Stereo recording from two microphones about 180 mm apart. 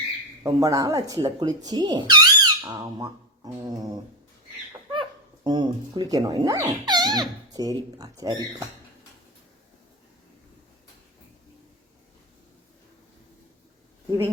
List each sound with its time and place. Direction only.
0.4 s speech: 20° right (ahead or behind)